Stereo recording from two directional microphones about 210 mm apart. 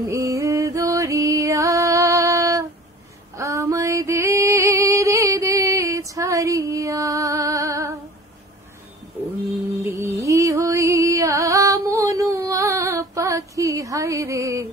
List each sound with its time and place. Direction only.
0.1 s music: 15° right (ahead or behind)
3.3 s a sound: 15° right (ahead or behind)
9.8 s music: 15° right (ahead or behind)